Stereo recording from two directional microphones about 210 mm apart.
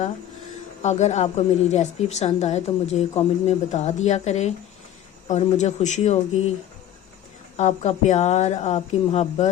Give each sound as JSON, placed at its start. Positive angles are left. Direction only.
{"t": 0.8, "sound": "a woman's voice", "side_deg": 35}
{"t": 7.5, "sound": "a woman's voice", "side_deg": 30}